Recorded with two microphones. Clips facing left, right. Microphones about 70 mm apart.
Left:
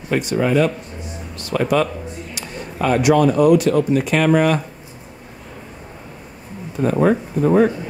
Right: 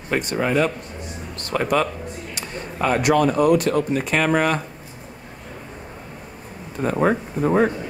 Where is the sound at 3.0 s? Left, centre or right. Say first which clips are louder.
Left 4 dB; right.